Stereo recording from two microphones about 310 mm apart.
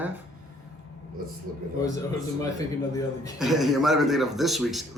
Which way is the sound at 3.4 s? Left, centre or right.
Centre.